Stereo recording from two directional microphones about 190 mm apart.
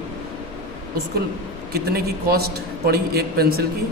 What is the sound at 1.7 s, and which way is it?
A man's voice, 55° right (ahead or behind).